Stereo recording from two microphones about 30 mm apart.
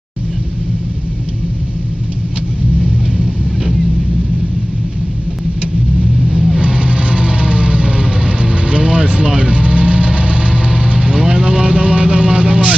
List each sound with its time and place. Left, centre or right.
6.2 s vehicle: centre
6.6 s vehicle: right